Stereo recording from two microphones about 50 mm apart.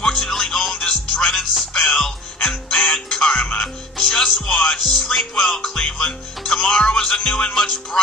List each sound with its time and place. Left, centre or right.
0.0 s music: centre